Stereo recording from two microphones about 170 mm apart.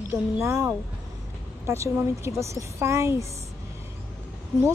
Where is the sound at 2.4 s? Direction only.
15° right (ahead or behind).